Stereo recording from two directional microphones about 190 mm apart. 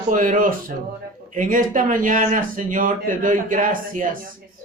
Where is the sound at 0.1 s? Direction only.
40° right (ahead or behind).